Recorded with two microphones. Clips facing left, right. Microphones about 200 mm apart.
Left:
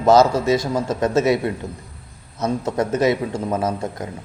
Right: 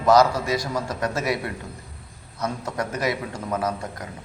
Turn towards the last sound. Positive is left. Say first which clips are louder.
# left 4 dB
turn(degrees=25)  # may be behind; listen again after turning